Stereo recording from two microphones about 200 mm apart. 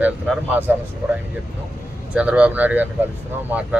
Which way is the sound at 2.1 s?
5° right (ahead or behind).